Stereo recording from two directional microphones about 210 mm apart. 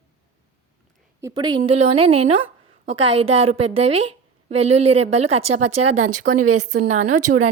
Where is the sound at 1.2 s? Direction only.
20° right (ahead or behind).